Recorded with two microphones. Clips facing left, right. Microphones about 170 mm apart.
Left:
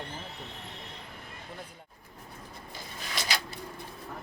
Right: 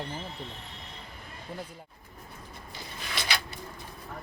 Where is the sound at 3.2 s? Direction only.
40° left (ahead or behind).